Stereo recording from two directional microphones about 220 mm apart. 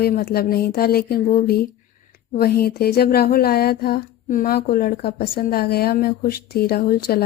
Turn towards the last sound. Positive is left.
turn(degrees=45)  # may be behind; listen again after turning